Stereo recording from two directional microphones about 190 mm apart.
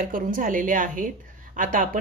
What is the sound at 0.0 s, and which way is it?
Speech, 45° right (ahead or behind).